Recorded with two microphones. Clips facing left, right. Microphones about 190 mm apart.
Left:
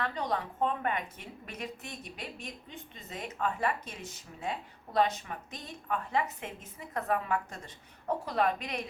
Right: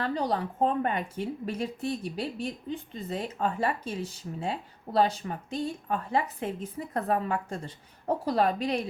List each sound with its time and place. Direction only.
0.0 s speech: 35° right (ahead or behind)